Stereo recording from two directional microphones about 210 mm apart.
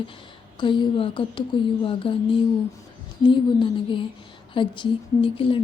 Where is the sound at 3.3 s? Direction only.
25° left (ahead or behind).